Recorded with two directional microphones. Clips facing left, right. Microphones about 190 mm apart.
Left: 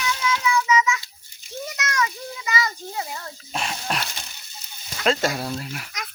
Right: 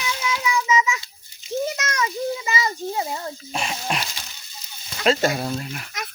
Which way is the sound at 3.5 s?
5° right (ahead or behind).